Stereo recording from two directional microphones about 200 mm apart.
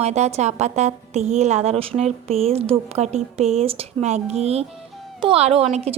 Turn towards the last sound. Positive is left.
turn(degrees=-30)  # may be behind; listen again after turning